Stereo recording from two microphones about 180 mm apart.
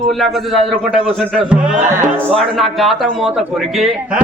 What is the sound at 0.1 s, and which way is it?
A man's voice, centre (ahead or behind).